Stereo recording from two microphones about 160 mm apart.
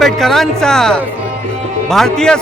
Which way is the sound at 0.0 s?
Centre (ahead or behind).